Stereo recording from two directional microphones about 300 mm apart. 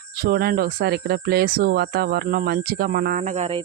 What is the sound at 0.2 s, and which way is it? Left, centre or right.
Speech, right.